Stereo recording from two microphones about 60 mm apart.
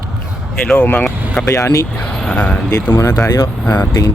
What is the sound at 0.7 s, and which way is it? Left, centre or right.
Speech, left.